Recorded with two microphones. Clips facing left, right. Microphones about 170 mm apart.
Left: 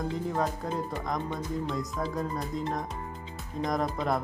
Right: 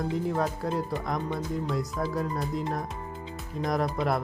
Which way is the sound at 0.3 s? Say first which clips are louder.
Right 2 dB; 5° right (ahead or behind).